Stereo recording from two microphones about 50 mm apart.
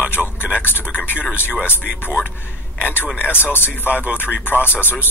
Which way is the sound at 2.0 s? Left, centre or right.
Left.